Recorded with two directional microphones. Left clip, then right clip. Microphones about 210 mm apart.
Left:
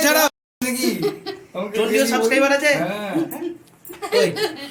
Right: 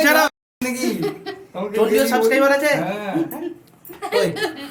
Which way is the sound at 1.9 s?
15° right (ahead or behind).